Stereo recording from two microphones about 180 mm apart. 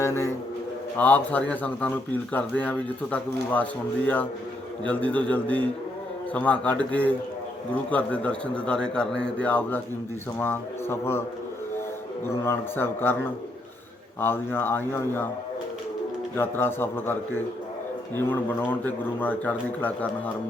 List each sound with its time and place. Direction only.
0.0 s pigeon: 15° left (ahead or behind)
0.9 s speech: 10° left (ahead or behind)
12.2 s speech: 15° left (ahead or behind)
14.2 s speech: 10° left (ahead or behind)
16.3 s speech: 10° left (ahead or behind)